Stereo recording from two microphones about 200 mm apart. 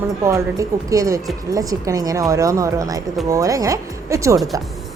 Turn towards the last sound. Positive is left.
turn(degrees=-15)  # may be behind; listen again after turning